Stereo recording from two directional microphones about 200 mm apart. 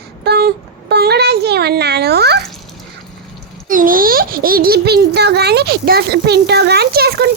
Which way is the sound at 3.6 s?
45° right (ahead or behind).